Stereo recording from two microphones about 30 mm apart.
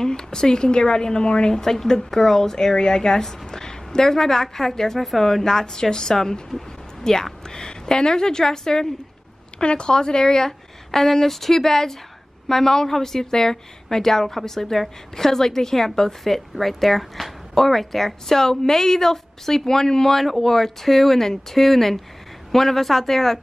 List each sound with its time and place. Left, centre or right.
0.0 s speech: left
1.5 s a woman's voice: centre
9.6 s a woman's voice: left; by 23.4 s centre